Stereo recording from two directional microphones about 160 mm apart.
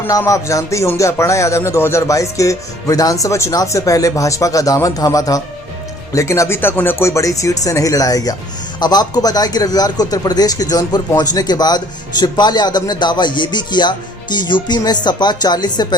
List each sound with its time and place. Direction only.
0.0 s music: 15° left (ahead or behind)